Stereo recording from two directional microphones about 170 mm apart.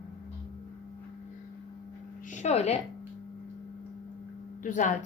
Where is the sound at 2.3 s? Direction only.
40° left (ahead or behind).